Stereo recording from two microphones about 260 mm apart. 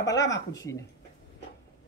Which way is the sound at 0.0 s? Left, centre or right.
Centre.